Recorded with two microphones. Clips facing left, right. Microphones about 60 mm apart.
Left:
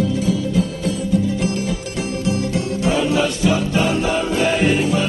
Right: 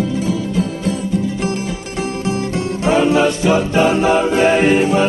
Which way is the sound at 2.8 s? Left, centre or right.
Right.